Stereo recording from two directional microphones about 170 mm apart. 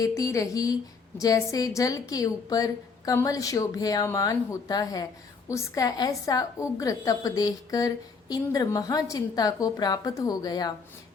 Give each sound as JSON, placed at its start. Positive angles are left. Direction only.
{"t": 0.0, "sound": "a woman's voice", "side_deg": 20}